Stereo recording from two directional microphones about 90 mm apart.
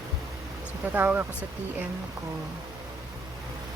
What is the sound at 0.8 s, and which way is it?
Speech, 20° right (ahead or behind).